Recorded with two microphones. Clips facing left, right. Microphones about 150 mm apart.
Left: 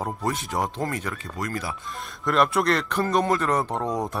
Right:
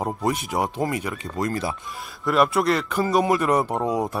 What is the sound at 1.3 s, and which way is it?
Speech, 25° right (ahead or behind).